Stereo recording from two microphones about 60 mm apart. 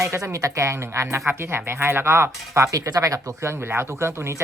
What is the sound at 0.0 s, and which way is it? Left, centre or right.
Speech, right.